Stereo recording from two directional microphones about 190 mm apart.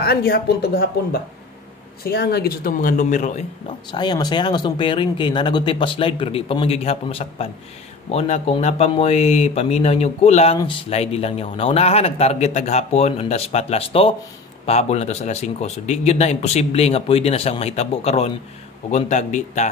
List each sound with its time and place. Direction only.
0.0 s speech: 60° left (ahead or behind); by 3.4 s 40° left (ahead or behind)
3.9 s speech: 25° left (ahead or behind); by 19.7 s 40° left (ahead or behind)